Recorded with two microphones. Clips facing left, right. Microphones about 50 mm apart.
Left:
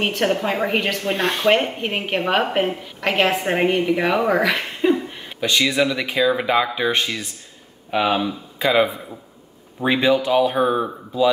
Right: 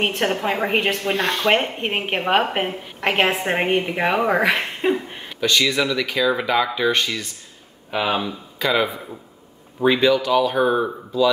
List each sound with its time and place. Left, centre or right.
0.0 s a woman's voice: centre
1.1 s speech: centre
1.5 s a woman's voice: centre
5.4 s speech: centre
7.9 s speech: centre
8.5 s speech: centre
9.9 s speech: left
10.5 s speech: centre